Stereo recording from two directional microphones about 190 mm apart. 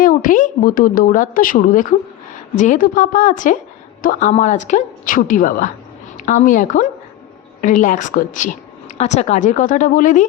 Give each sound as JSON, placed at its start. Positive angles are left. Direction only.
{"t": 0.0, "sound": "a woman's voice", "side_deg": 45}